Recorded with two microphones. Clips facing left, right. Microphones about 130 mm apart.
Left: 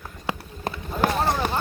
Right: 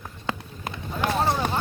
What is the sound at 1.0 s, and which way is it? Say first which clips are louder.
Run: left 3 dB; 40° left (ahead or behind).